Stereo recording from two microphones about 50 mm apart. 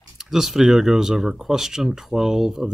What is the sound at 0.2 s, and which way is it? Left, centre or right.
Speech, centre.